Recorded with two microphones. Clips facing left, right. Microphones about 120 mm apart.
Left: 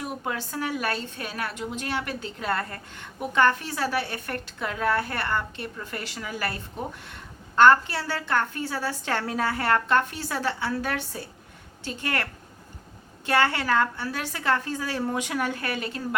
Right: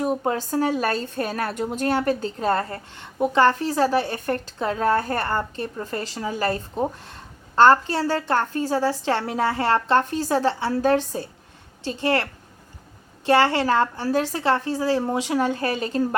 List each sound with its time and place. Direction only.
0.0 s a woman's voice: 35° right (ahead or behind)